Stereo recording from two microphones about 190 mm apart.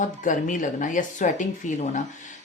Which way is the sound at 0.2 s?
40° left (ahead or behind).